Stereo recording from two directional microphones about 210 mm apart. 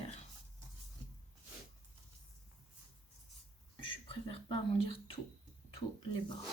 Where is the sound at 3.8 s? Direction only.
25° left (ahead or behind).